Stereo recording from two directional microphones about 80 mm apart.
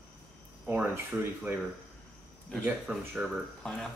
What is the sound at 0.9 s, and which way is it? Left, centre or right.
Speech, right.